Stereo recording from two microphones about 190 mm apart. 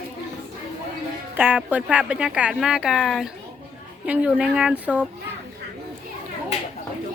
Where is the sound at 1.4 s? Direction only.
10° right (ahead or behind).